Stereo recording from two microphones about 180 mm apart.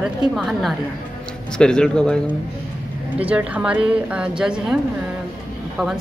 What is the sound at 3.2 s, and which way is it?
A woman's voice, 10° right (ahead or behind).